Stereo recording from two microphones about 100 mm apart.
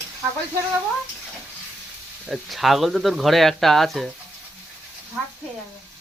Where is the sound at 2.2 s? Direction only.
5° right (ahead or behind).